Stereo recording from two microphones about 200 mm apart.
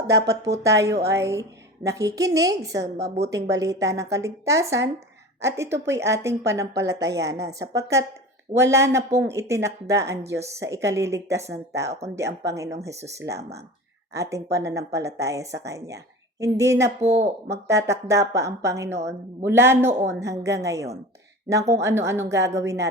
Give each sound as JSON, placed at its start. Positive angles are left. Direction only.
{"t": 0.2, "sound": "speech", "side_deg": -55}
{"t": 0.6, "sound": "a woman's voice", "side_deg": -15}
{"t": 7.0, "sound": "speech", "side_deg": -60}
{"t": 7.7, "sound": "a woman's voice", "side_deg": -15}